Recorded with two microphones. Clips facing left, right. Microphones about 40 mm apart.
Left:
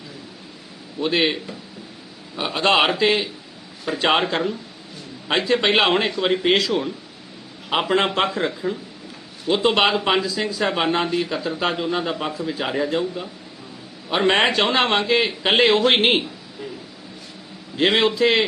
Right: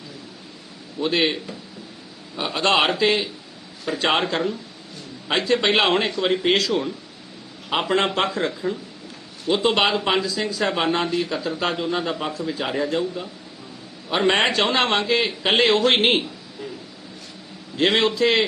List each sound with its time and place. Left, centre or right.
0.9 s speech: centre
17.7 s speech: centre